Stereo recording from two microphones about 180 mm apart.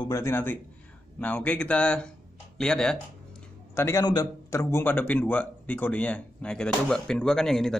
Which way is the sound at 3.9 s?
20° left (ahead or behind).